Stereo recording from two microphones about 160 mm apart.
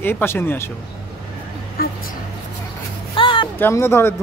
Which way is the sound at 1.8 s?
65° left (ahead or behind).